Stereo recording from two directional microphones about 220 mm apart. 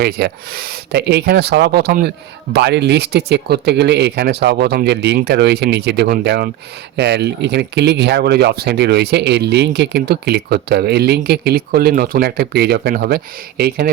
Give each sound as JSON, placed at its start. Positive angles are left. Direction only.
{"t": 0.0, "sound": "speech", "side_deg": -45}